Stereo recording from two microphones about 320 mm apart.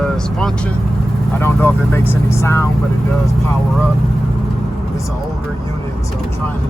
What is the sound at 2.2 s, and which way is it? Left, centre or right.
Speech, centre.